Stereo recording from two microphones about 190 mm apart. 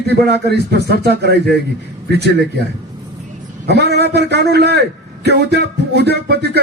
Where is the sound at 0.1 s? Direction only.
60° right (ahead or behind).